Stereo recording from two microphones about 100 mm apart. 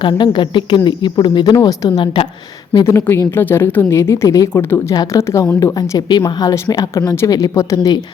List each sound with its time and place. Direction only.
0.0 s speech: 55° left (ahead or behind)
2.8 s speech: 30° left (ahead or behind)
6.0 s speech: 45° left (ahead or behind)